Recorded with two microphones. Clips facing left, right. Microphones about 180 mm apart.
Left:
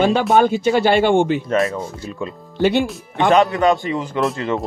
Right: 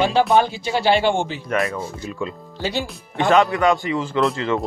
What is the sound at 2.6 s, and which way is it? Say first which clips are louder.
Speech: left 9 dB; 60° left (ahead or behind).